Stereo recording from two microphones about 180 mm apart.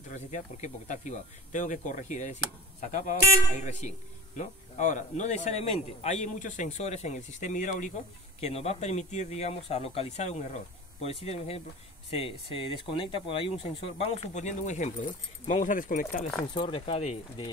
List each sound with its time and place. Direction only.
0.1 s speech: 40° left (ahead or behind)
16.5 s speech: 30° left (ahead or behind)